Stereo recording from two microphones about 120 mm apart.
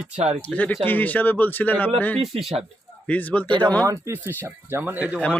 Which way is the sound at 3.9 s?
25° right (ahead or behind).